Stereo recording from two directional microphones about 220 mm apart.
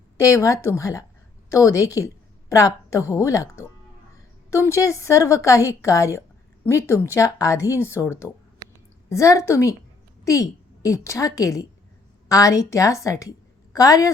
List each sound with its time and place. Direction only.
0.2 s a woman's voice: 15° left (ahead or behind)